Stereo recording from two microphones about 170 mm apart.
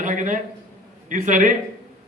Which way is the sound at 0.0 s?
50° right (ahead or behind).